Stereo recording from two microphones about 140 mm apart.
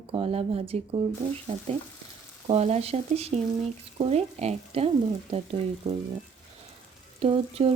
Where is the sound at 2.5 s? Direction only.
50° right (ahead or behind).